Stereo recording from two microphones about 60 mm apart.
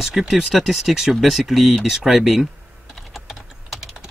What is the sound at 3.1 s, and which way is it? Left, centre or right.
Typing, centre.